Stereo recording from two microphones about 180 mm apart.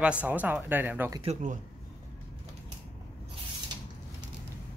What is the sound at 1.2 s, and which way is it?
Speech, 45° right (ahead or behind).